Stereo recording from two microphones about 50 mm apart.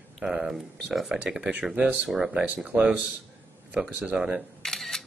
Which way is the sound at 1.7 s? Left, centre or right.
Right.